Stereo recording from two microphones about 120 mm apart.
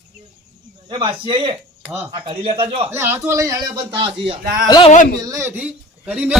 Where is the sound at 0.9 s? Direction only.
45° right (ahead or behind).